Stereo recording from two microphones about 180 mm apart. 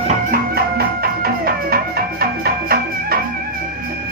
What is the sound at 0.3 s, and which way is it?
Music, 60° right (ahead or behind).